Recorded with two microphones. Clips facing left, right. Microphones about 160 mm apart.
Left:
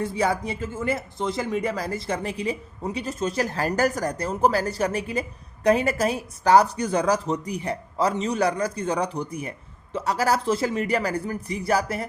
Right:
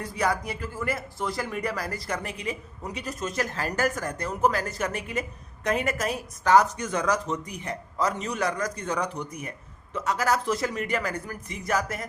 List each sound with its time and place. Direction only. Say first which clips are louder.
0.0 s a man's voice: left 3 dB; 25° left (ahead or behind)